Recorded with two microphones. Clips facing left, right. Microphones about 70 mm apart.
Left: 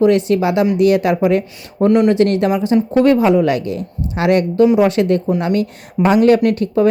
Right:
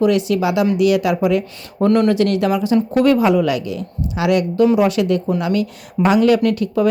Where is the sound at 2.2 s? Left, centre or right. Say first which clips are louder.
Left 2 dB; left.